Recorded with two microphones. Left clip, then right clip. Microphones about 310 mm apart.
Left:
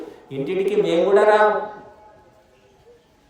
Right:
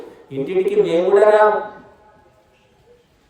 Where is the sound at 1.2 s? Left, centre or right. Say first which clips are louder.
Right 4 dB; centre.